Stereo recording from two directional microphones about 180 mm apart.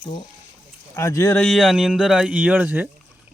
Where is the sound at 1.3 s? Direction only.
Centre (ahead or behind).